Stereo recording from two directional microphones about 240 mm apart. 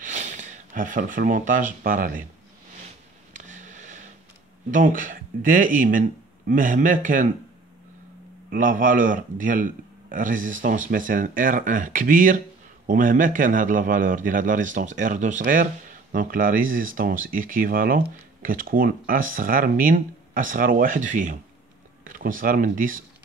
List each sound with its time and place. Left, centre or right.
0.0 s speech: right
3.3 s a sound: right
4.6 s a man's voice: right
8.5 s a man's voice: right